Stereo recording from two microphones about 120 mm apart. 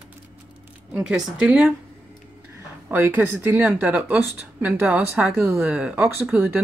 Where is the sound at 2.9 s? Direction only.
15° right (ahead or behind).